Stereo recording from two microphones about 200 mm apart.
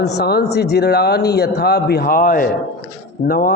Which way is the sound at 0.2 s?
55° left (ahead or behind).